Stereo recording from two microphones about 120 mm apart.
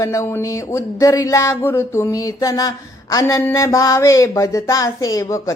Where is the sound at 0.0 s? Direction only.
25° left (ahead or behind).